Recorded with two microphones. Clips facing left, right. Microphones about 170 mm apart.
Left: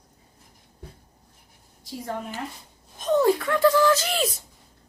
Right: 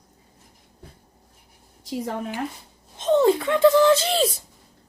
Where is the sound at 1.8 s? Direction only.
80° right.